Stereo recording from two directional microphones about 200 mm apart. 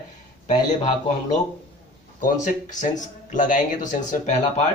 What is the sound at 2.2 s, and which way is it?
Speech, 40° left (ahead or behind).